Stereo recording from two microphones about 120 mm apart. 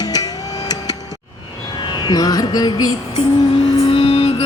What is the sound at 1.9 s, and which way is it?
Music, 35° left (ahead or behind).